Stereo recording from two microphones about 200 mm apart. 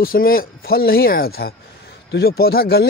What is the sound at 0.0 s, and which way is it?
Speech, 45° left (ahead or behind).